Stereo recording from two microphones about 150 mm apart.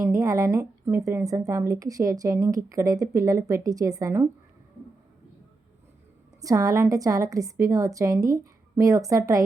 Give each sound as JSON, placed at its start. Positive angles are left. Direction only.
{"t": 0.0, "sound": "speech", "side_deg": -20}
{"t": 6.4, "sound": "speech", "side_deg": -20}